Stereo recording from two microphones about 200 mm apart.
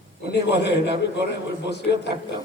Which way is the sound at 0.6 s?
60° left (ahead or behind).